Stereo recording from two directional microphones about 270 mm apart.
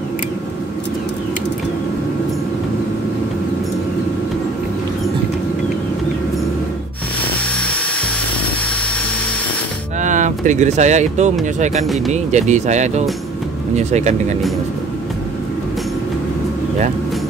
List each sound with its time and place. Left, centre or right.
10.0 s speech: right